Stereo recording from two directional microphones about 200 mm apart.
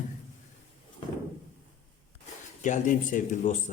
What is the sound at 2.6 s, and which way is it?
Speech, 40° left (ahead or behind).